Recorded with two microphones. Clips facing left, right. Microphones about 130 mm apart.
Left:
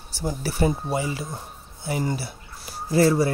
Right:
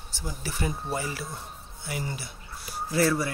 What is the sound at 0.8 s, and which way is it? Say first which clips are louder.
Speech: left 5 dB; 15° left (ahead or behind).